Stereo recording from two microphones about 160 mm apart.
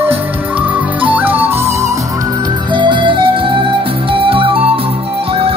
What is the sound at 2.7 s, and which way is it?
Music, 30° right (ahead or behind).